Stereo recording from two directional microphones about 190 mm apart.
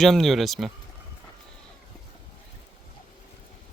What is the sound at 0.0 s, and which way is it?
Speech, centre (ahead or behind).